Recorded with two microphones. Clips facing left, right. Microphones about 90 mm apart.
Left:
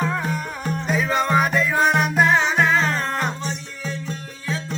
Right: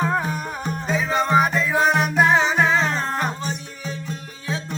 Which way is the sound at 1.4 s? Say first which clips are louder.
Right 1 dB; 5° right (ahead or behind).